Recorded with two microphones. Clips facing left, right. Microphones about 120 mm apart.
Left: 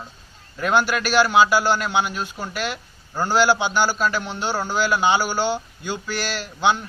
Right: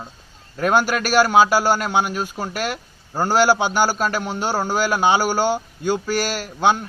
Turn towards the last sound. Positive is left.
turn(degrees=-45)  # may be behind; listen again after turning